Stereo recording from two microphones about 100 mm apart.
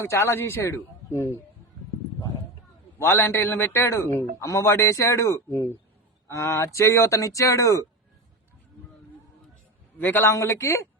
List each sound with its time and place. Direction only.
0.0 s a man's voice: 25° left (ahead or behind)
3.0 s a man's voice: 20° left (ahead or behind)
10.0 s a man's voice: 20° left (ahead or behind)
10.3 s a man's voice: 30° left (ahead or behind)